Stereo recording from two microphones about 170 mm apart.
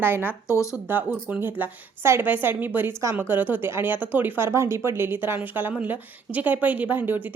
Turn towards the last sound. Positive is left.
turn(degrees=-10)  # may be behind; listen again after turning